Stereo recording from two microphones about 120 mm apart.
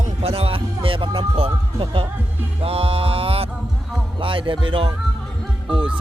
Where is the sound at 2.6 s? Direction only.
55° right (ahead or behind).